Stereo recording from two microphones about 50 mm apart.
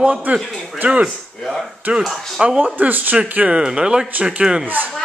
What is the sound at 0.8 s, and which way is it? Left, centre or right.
Speech, right.